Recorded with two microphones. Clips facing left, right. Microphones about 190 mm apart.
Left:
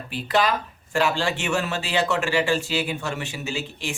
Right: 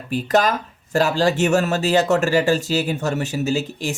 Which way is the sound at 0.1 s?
45° right (ahead or behind).